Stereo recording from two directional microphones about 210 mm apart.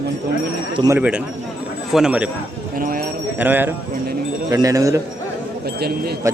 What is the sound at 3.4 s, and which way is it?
Speech, 10° right (ahead or behind).